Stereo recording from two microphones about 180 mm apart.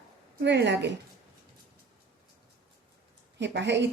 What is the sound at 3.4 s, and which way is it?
Speech, 75° right (ahead or behind).